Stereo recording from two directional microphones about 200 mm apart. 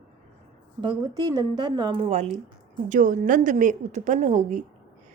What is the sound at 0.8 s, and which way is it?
A woman's voice, 20° right (ahead or behind).